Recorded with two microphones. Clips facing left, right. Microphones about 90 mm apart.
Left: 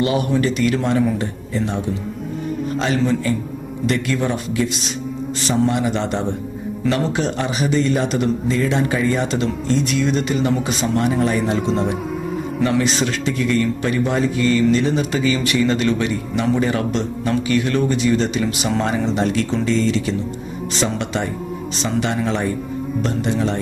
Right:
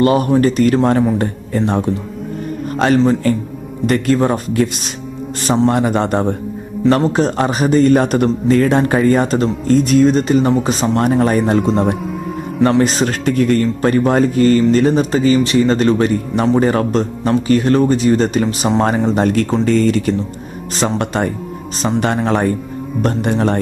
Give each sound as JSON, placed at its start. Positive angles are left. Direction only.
{"t": 0.0, "sound": "a man's voice", "side_deg": -45}